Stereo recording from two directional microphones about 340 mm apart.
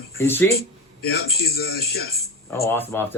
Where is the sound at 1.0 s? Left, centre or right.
Left.